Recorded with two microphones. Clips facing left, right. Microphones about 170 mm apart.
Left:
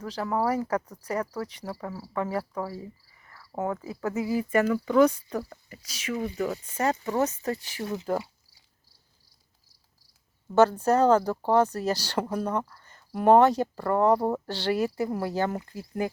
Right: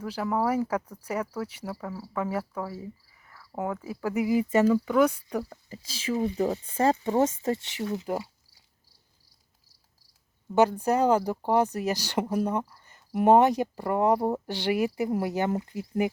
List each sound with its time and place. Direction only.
0.0 s speech: 5° right (ahead or behind)
1.7 s speech: centre (ahead or behind)
3.2 s cricket: 5° right (ahead or behind)
3.8 s speech: 15° right (ahead or behind)
4.9 s speech: 10° right (ahead or behind)
5.6 s speech: 30° right (ahead or behind)
10.5 s speech: 15° right (ahead or behind)